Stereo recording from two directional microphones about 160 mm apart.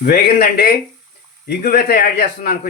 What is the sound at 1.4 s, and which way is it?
Speech, 80° left.